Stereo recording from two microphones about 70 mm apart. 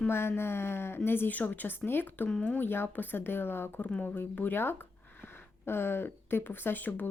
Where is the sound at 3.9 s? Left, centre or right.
Centre.